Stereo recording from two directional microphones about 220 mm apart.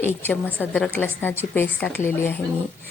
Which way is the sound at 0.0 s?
10° left (ahead or behind).